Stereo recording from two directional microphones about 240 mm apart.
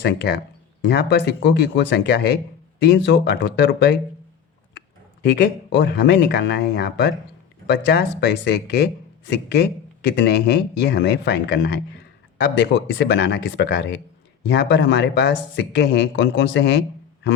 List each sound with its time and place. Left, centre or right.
0.0 s speech: left
5.2 s speech: left